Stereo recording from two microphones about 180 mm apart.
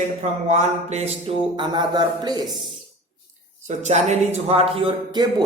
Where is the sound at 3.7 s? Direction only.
40° right (ahead or behind); by 5.4 s 25° right (ahead or behind).